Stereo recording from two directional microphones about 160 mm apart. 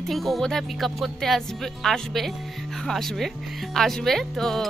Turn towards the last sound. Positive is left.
turn(degrees=0)  # may be behind; listen again after turning